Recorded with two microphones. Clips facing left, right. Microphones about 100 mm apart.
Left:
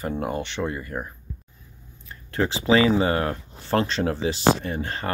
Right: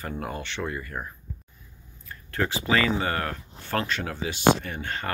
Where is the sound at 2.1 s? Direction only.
25° left (ahead or behind).